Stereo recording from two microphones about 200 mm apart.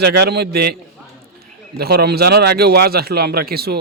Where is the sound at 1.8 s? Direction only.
50° right (ahead or behind).